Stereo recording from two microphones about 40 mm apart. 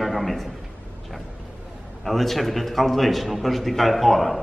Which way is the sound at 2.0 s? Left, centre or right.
Centre.